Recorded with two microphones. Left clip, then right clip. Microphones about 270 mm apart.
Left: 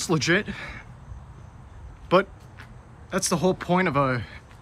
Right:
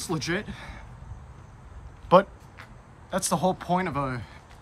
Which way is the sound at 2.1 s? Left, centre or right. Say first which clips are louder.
Right 2 dB; centre.